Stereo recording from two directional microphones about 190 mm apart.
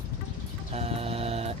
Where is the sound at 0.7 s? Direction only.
30° right (ahead or behind).